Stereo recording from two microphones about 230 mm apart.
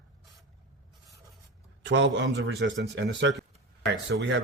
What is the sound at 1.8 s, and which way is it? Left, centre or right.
Speech, right.